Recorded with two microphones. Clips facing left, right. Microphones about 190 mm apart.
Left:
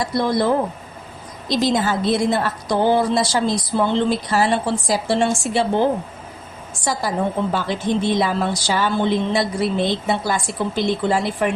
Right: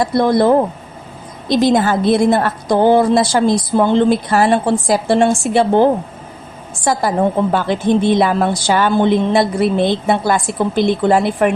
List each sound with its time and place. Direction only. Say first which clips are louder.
0.0 s a woman's voice: right 6 dB; 55° right (ahead or behind)